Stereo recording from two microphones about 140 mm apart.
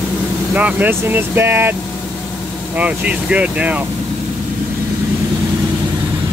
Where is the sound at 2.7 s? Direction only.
10° right (ahead or behind).